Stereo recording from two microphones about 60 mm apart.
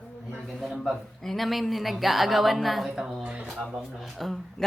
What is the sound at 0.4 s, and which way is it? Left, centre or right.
A man's voice, centre.